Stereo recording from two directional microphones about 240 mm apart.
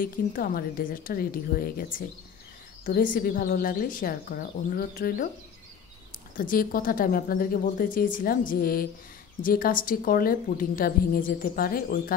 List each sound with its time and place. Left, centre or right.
0.0 s a woman's voice: left
6.3 s a woman's voice: left